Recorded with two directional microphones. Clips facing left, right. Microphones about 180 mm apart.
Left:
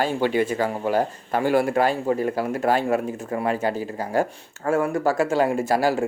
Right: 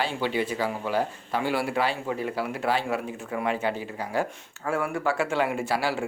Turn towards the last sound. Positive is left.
turn(degrees=45)  # may be behind; listen again after turning